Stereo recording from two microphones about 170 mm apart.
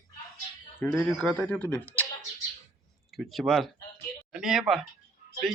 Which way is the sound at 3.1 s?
Centre (ahead or behind).